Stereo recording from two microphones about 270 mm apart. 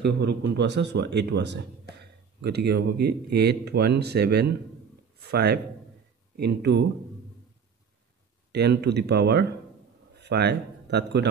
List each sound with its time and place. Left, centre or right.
0.0 s speech: right
8.5 s speech: right